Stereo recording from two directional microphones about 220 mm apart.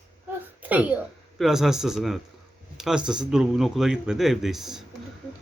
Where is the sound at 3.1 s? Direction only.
5° right (ahead or behind).